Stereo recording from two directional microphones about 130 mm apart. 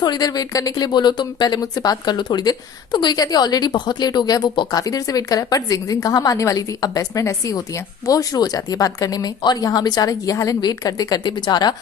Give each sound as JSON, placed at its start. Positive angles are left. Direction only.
{"t": 0.0, "sound": "speech", "side_deg": 30}